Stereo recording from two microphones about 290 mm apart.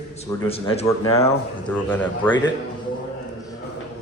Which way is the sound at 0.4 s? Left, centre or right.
Centre.